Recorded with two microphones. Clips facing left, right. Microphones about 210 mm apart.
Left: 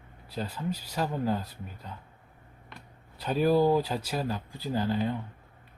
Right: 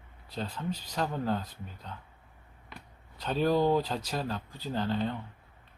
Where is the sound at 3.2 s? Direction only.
10° left (ahead or behind).